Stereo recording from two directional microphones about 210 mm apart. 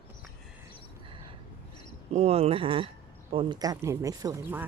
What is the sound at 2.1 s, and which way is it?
Speech, 30° right (ahead or behind).